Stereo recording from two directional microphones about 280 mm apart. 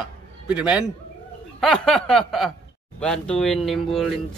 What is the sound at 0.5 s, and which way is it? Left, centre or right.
Speech, centre.